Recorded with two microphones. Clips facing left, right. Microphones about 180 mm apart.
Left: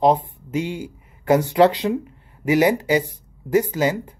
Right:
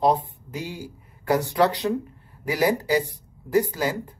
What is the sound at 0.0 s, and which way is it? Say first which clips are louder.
Speech: left 4 dB; 20° left (ahead or behind).